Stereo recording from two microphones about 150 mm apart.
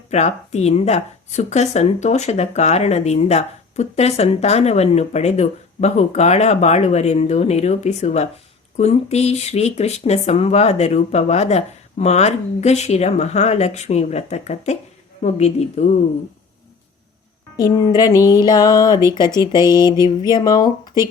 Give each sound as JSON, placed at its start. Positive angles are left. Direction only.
{"t": 0.1, "sound": "speech", "side_deg": 50}
{"t": 17.6, "sound": "speech", "side_deg": 25}